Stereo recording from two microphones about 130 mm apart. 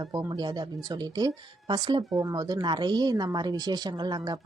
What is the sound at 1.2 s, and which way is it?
Speech, 30° right (ahead or behind).